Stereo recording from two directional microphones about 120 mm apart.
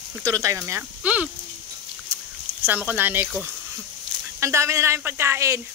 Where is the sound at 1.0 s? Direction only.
10° right (ahead or behind).